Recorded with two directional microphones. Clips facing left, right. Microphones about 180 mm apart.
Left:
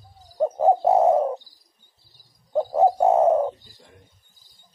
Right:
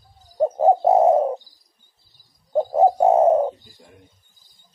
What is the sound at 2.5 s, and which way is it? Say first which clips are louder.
Bird: right 2 dB; 20° right (ahead or behind).